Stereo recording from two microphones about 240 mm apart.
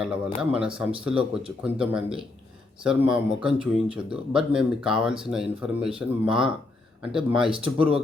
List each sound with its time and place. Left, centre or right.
0.0 s speech: centre
7.5 s speech: right